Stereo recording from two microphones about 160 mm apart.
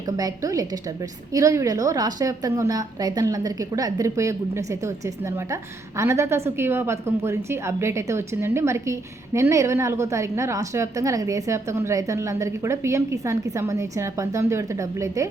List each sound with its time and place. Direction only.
0.2 s a woman's voice: 20° right (ahead or behind)